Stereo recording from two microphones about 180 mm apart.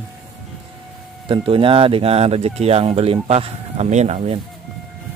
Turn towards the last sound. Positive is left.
turn(degrees=-35)  # may be behind; listen again after turning